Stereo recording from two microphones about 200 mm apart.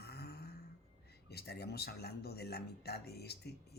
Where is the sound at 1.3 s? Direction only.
55° left (ahead or behind).